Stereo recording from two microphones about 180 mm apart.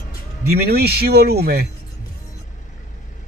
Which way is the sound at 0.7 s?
65° right (ahead or behind).